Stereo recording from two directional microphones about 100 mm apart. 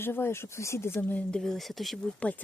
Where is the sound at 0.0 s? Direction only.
25° left (ahead or behind).